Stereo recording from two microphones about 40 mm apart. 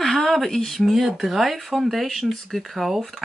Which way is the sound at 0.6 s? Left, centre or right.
Centre.